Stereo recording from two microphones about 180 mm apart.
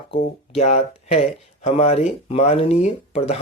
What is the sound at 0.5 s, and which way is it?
Speech, 35° left (ahead or behind).